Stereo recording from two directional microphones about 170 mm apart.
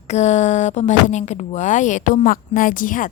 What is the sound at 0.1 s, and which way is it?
A woman's voice, 40° left (ahead or behind).